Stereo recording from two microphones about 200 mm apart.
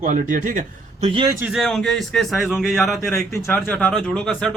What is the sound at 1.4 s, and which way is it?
A man's voice, centre (ahead or behind).